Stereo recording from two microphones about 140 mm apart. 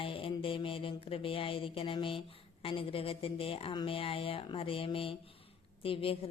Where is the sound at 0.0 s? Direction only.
40° left (ahead or behind).